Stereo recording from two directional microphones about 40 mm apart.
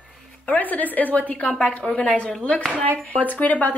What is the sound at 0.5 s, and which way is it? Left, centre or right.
A woman's voice, left.